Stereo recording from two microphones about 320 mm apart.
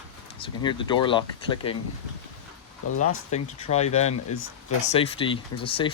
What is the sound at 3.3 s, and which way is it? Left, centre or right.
Speech, left.